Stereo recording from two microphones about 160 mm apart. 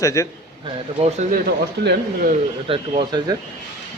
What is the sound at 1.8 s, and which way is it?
Speech, 90° right.